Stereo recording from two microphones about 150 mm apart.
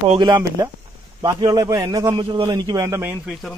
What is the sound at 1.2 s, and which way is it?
A man's voice, 25° right (ahead or behind).